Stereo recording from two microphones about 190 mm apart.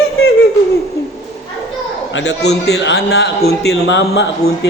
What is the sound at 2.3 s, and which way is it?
A man's voice, 60° left (ahead or behind).